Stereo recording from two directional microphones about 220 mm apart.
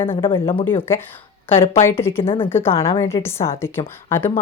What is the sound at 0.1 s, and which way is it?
Speech, 25° left (ahead or behind).